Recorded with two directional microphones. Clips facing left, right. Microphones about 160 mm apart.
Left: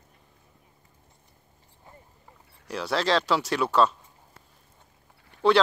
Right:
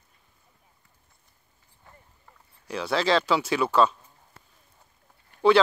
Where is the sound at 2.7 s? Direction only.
Centre (ahead or behind).